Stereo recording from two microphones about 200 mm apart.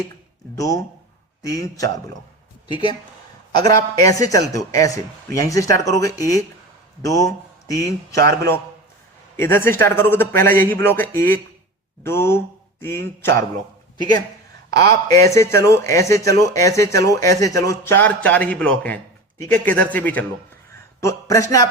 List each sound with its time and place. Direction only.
0.5 s speech: 15° left (ahead or behind)
3.6 s speech: 15° left (ahead or behind)
15.0 s speech: 15° left (ahead or behind)